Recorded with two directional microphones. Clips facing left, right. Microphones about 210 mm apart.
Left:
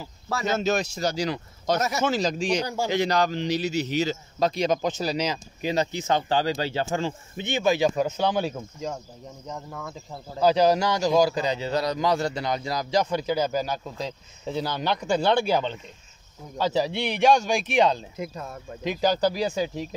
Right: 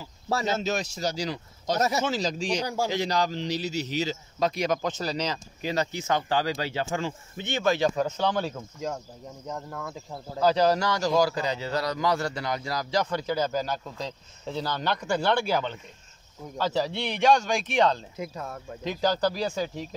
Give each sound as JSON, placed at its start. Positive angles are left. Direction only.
{"t": 0.5, "sound": "speech", "side_deg": 55}
{"t": 1.8, "sound": "speech", "side_deg": -30}
{"t": 2.0, "sound": "speech", "side_deg": 55}
{"t": 2.6, "sound": "speech", "side_deg": -10}
{"t": 2.9, "sound": "speech", "side_deg": 60}
{"t": 4.4, "sound": "speech", "side_deg": 30}
{"t": 4.8, "sound": "speech", "side_deg": 10}
{"t": 7.3, "sound": "a man's voice", "side_deg": 15}
{"t": 9.5, "sound": "speech", "side_deg": 0}
{"t": 10.4, "sound": "a man's voice", "side_deg": 15}
{"t": 18.2, "sound": "speech", "side_deg": 0}
{"t": 18.9, "sound": "a man's voice", "side_deg": 15}